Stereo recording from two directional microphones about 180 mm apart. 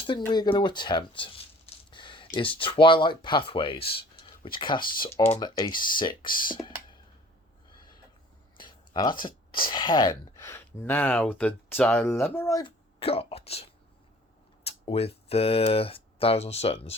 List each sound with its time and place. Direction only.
0.1 s speech: 25° left (ahead or behind)
7.7 s owl: 25° left (ahead or behind)
8.5 s a sound: 25° left (ahead or behind)
9.2 s speech: 25° left (ahead or behind)
12.6 s speech: 30° left (ahead or behind)